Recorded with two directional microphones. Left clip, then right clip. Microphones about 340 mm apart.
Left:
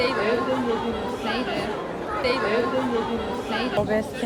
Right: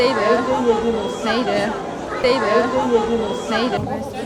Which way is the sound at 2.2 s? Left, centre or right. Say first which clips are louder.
Right 7 dB; centre.